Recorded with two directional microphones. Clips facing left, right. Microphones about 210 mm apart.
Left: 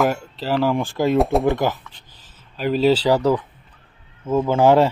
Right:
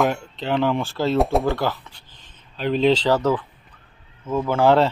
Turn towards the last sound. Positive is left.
turn(degrees=15)  # may be behind; listen again after turning